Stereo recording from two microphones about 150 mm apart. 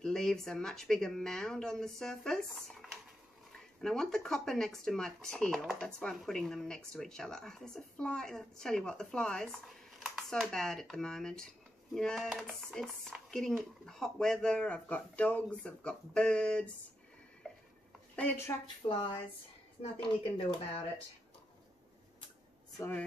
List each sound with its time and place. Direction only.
0.0 s speech: 5° left (ahead or behind)
17.4 s a sound: 5° left (ahead or behind)
18.1 s speech: 10° left (ahead or behind)
18.8 s speech: 25° left (ahead or behind)
19.8 s speech: 35° left (ahead or behind)
22.8 s speech: 15° left (ahead or behind)